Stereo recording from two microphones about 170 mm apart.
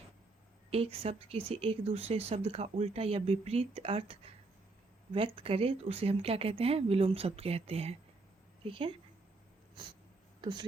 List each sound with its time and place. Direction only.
0.7 s speech: 35° right (ahead or behind)